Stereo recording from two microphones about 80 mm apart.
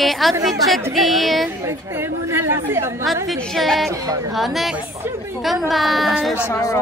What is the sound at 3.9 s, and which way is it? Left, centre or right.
Speech, right.